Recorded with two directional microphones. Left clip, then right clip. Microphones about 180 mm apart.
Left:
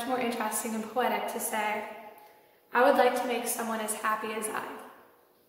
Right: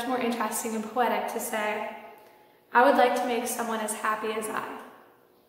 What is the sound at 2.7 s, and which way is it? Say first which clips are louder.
A woman's voice: right 3 dB; 5° right (ahead or behind).